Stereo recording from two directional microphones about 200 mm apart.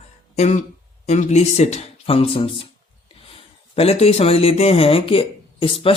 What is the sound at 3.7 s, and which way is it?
Speech, 30° left (ahead or behind).